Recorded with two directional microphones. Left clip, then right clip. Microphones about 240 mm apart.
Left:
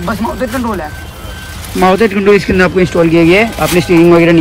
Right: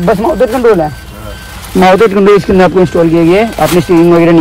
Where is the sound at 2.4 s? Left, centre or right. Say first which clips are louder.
Right 3 dB; centre.